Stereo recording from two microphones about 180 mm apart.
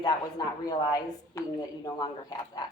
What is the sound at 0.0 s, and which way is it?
A woman's voice, 25° left (ahead or behind).